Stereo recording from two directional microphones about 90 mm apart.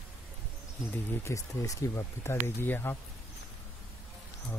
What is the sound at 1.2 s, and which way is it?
Speech, 35° left (ahead or behind).